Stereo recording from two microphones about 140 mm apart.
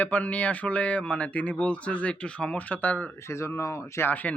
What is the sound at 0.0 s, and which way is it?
Speech, 10° left (ahead or behind).